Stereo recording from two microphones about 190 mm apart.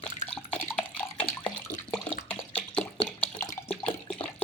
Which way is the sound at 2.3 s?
10° left (ahead or behind).